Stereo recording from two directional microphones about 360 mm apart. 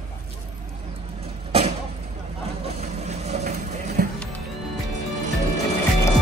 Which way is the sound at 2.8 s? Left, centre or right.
Centre.